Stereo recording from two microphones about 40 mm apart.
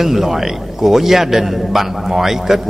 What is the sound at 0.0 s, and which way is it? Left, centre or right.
A man's voice, centre.